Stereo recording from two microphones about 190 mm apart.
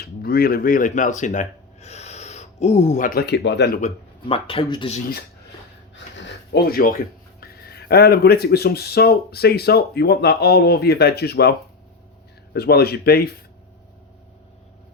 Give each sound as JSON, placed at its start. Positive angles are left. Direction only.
{"t": 0.0, "sound": "speech", "side_deg": 55}
{"t": 3.8, "sound": "speech", "side_deg": 30}
{"t": 6.1, "sound": "speech", "side_deg": 65}
{"t": 12.5, "sound": "speech", "side_deg": 55}